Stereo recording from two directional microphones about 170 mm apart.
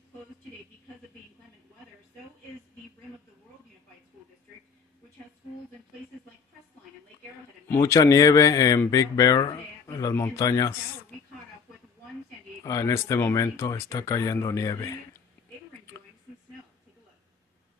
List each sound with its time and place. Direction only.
7.6 s speech: 15° left (ahead or behind)
12.6 s speech: 20° left (ahead or behind)